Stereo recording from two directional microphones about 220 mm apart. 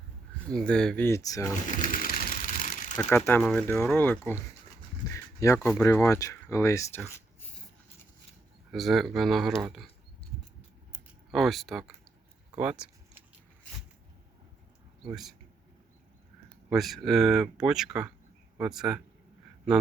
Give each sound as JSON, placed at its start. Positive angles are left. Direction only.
{"t": 0.5, "sound": "speech", "side_deg": 5}
{"t": 1.6, "sound": "a sound", "side_deg": 35}
{"t": 3.0, "sound": "speech", "side_deg": 5}
{"t": 8.7, "sound": "speech", "side_deg": 0}
{"t": 11.3, "sound": "speech", "side_deg": 0}
{"t": 12.5, "sound": "a sound", "side_deg": -5}
{"t": 15.1, "sound": "speech", "side_deg": 0}
{"t": 16.6, "sound": "speech", "side_deg": 0}